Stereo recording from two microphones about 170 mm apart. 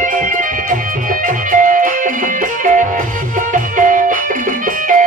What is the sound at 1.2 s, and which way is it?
Music, 50° right (ahead or behind).